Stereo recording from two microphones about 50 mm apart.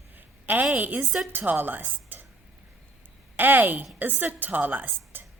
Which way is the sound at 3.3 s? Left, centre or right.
Right.